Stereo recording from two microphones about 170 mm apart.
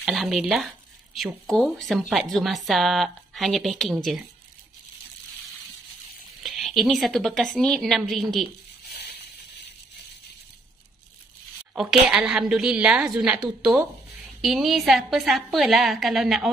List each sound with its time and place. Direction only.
0.0 s a woman's voice: centre (ahead or behind)
6.4 s a woman's voice: centre (ahead or behind)
8.8 s a sound: 70° left (ahead or behind)
11.7 s a woman's voice: centre (ahead or behind)